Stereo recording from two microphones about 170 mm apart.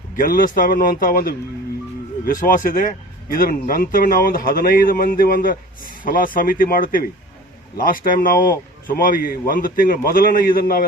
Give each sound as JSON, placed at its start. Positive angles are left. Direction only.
{"t": 0.2, "sound": "a man's voice", "side_deg": 55}